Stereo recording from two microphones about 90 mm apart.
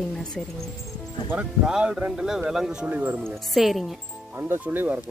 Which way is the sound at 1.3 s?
10° right (ahead or behind).